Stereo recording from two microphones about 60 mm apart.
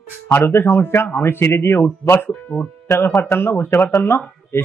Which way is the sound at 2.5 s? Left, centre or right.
Left.